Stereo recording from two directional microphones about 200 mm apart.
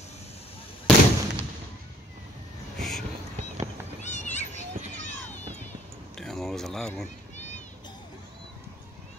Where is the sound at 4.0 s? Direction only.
35° left (ahead or behind).